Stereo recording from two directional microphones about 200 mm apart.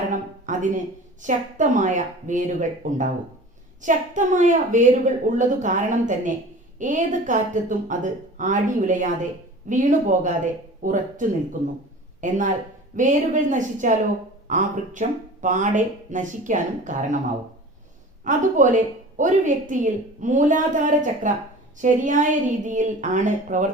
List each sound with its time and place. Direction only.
0.1 s a sound: 40° right (ahead or behind)
1.2 s a woman's voice: 40° right (ahead or behind)
18.3 s a woman's voice: 40° right (ahead or behind)